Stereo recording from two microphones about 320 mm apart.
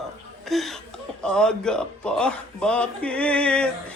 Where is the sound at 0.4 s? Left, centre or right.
Centre.